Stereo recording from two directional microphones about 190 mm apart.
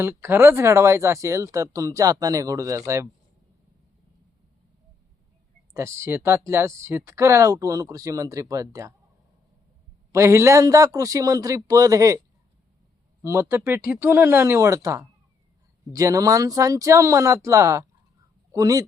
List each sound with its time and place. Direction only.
0.0 s speech: 10° right (ahead or behind)
5.7 s speech: 15° right (ahead or behind)
10.1 s speech: 15° right (ahead or behind)
13.2 s speech: 15° right (ahead or behind)